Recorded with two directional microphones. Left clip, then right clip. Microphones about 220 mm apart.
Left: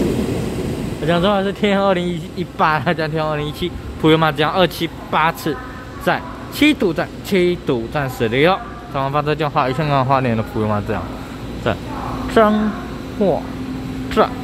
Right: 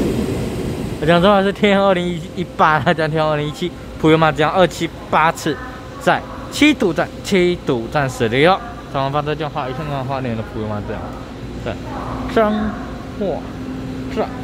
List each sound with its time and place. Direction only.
1.0 s speech: 15° right (ahead or behind); by 11.0 s 15° left (ahead or behind)
12.4 s speech: 5° left (ahead or behind)
13.2 s speech: 15° left (ahead or behind)